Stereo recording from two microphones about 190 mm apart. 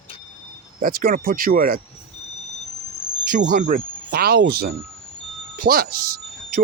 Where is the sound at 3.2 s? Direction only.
50° right (ahead or behind).